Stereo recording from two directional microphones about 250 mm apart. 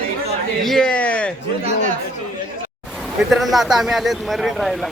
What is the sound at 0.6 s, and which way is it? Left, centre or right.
Speech, centre.